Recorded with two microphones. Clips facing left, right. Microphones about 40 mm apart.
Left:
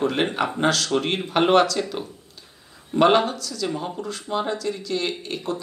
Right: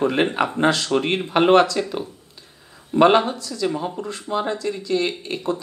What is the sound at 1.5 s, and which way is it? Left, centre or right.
Speech, right.